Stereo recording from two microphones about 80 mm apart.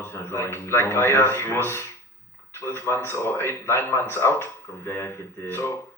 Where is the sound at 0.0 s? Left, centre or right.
Left.